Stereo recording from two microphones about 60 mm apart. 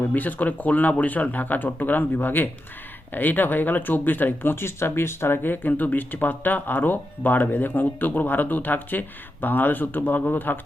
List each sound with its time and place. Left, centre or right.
0.1 s speech: left